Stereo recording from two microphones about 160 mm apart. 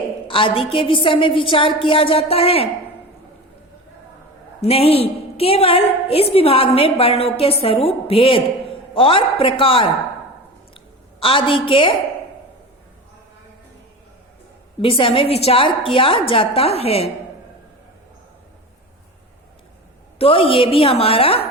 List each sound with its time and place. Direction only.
0.3 s a woman's voice: 35° left (ahead or behind)
4.6 s a woman's voice: 40° left (ahead or behind)
10.8 s a sound: 35° left (ahead or behind)
14.8 s a woman's voice: 35° left (ahead or behind)
20.1 s a woman's voice: 35° left (ahead or behind)